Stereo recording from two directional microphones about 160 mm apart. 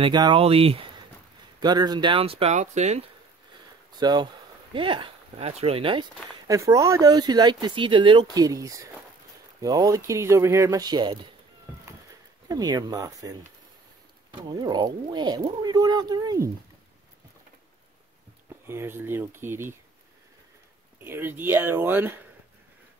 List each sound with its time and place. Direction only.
0.0 s speech: 30° right (ahead or behind)
1.6 s speech: 25° right (ahead or behind); by 3.1 s 45° right (ahead or behind)
3.9 s speech: 25° right (ahead or behind)
6.4 s speech: 20° right (ahead or behind)
12.4 s speech: 25° right (ahead or behind)
14.5 s speech: 25° right (ahead or behind)
18.7 s speech: 15° right (ahead or behind)
21.0 s speech: 15° right (ahead or behind)